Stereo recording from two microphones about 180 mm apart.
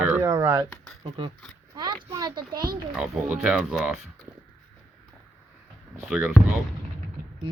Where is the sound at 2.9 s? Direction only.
5° right (ahead or behind).